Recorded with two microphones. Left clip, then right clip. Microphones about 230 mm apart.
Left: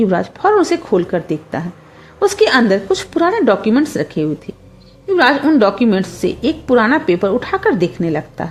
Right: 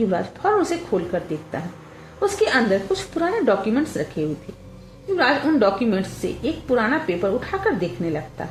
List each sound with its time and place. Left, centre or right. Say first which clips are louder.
0.1 s a woman's voice: left 7 dB; left